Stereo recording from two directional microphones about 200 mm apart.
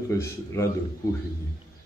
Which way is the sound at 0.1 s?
15° left (ahead or behind).